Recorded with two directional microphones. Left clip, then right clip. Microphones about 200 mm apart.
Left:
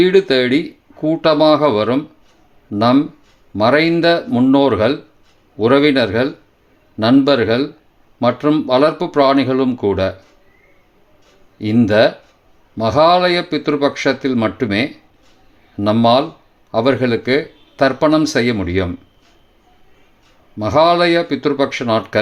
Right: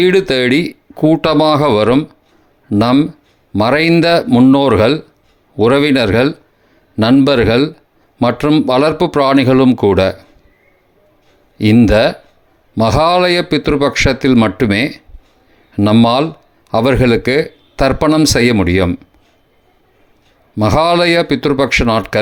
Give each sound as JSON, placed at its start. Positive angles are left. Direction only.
{"t": 0.0, "sound": "a man's voice", "side_deg": -35}
{"t": 11.5, "sound": "a man's voice", "side_deg": -35}
{"t": 20.6, "sound": "a man's voice", "side_deg": -35}